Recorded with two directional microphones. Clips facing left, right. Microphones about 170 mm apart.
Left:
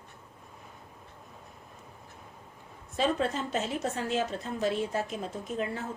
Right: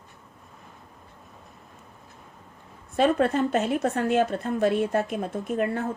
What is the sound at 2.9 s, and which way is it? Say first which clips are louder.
A woman's voice: right 7 dB; 60° right (ahead or behind).